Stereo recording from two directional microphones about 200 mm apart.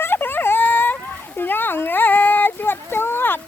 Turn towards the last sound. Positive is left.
turn(degrees=10)  # may be behind; listen again after turning